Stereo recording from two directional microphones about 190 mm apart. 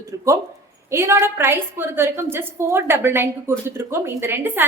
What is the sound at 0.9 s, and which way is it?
A woman's voice, 15° right (ahead or behind).